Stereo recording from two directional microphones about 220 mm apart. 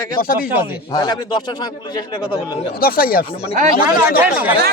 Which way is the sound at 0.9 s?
20° left (ahead or behind).